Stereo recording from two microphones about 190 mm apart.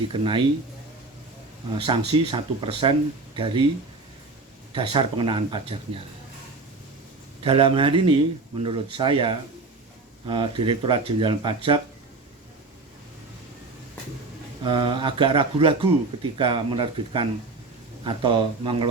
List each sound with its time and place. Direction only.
0.1 s speech: 25° right (ahead or behind)
1.8 s speech: 30° right (ahead or behind)
4.7 s speech: 25° right (ahead or behind)
7.4 s speech: 25° right (ahead or behind)
14.6 s speech: 25° right (ahead or behind)